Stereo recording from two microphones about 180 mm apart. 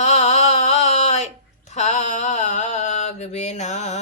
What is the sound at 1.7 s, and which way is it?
Mantra, 40° left (ahead or behind).